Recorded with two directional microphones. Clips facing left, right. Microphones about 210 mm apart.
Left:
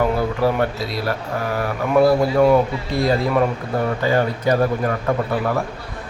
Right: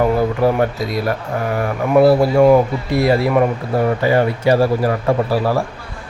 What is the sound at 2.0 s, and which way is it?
Speech, 30° right (ahead or behind).